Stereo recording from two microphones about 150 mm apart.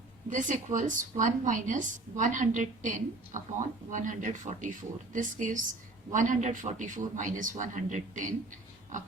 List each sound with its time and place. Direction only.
0.3 s a woman's voice: 60° right (ahead or behind)